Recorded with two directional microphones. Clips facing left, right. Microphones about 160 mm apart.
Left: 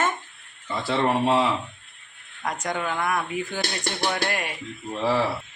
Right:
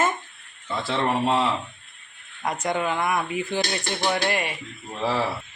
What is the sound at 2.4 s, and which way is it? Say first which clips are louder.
Speech: right 3 dB; 10° right (ahead or behind).